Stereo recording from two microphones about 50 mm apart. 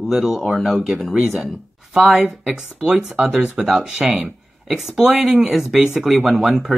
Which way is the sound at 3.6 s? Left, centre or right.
Centre.